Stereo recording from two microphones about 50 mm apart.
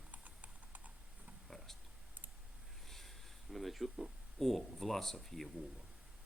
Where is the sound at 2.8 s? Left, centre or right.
Centre.